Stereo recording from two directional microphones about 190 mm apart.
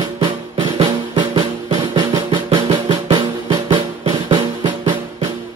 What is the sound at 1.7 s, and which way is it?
Drum, 20° right (ahead or behind).